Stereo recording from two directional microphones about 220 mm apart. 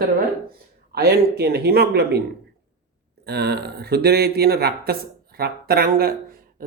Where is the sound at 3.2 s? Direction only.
50° right (ahead or behind).